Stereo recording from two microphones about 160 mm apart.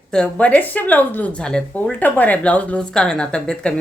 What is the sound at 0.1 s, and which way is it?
Speech, 5° left (ahead or behind).